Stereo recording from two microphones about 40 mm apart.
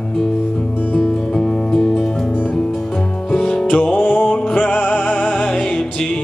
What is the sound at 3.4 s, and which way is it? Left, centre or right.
Music, centre.